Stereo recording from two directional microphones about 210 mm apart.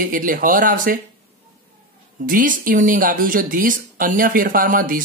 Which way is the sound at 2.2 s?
40° right (ahead or behind).